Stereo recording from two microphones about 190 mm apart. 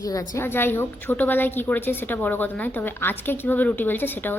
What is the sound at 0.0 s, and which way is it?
A woman's voice, 20° left (ahead or behind).